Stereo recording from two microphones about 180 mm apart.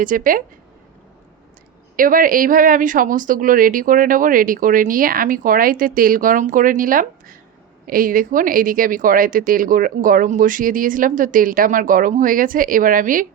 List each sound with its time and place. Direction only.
0.0 s speech: 50° right (ahead or behind)
2.0 s speech: 50° right (ahead or behind)